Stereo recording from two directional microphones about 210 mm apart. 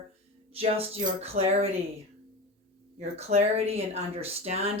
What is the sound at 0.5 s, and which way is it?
Speech, 30° right (ahead or behind).